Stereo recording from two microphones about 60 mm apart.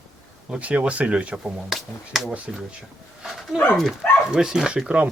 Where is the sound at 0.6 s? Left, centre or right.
Right.